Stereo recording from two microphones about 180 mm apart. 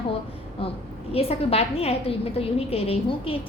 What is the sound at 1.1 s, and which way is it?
A woman's voice, 35° left (ahead or behind).